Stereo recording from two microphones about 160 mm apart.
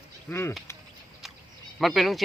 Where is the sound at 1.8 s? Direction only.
Centre (ahead or behind).